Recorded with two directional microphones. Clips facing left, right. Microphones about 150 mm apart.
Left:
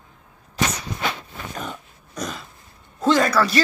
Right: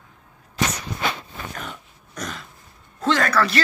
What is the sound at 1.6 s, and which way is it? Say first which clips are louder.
Dog: left 3 dB; 10° left (ahead or behind).